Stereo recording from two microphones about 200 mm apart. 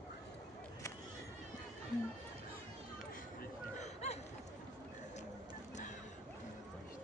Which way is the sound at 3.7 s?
35° left (ahead or behind).